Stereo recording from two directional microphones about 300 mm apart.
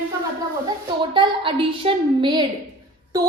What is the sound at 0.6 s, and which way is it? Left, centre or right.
A woman's voice, centre.